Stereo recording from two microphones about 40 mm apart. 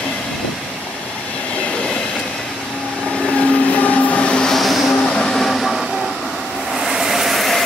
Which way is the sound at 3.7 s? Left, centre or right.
Left.